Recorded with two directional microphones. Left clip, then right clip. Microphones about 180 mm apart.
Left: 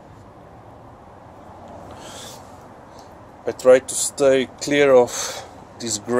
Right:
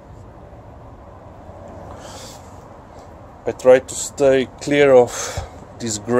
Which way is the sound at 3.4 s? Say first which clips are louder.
Right 1 dB; 10° right (ahead or behind).